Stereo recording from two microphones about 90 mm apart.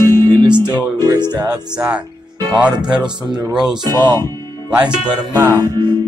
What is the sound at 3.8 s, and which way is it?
Speech, 50° right (ahead or behind).